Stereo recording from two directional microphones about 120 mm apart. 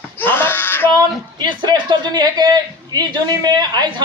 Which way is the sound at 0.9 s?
35° right (ahead or behind).